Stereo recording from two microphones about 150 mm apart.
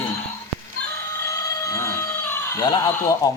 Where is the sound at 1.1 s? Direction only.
20° left (ahead or behind).